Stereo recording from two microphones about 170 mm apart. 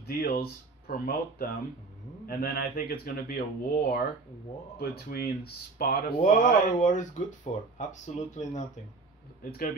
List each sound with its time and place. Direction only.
0.0 s speech: 60° left (ahead or behind)
6.2 s speech: 45° left (ahead or behind)
9.4 s speech: 60° left (ahead or behind)